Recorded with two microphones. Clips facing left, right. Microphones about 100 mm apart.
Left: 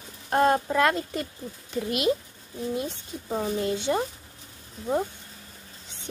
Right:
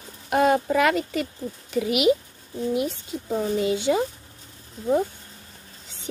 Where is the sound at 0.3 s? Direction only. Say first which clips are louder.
Right 2 dB; 90° right.